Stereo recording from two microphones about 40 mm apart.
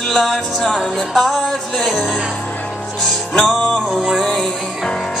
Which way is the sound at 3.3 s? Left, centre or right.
Centre.